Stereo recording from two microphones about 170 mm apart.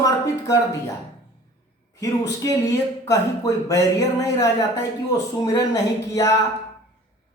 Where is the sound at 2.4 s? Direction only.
20° left (ahead or behind).